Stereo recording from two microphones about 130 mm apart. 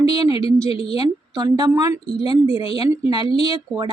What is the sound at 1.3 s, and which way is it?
Speech, 30° right (ahead or behind).